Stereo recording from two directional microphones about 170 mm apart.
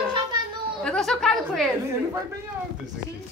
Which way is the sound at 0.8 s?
5° left (ahead or behind).